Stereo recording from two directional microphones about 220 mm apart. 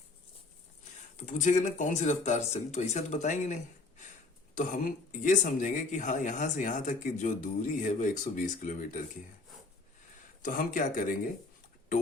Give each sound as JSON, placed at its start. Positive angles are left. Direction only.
{"t": 1.1, "sound": "speech", "side_deg": 35}
{"t": 10.4, "sound": "speech", "side_deg": 40}